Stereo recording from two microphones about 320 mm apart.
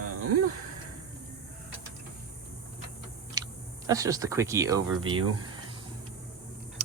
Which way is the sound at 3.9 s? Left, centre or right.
Centre.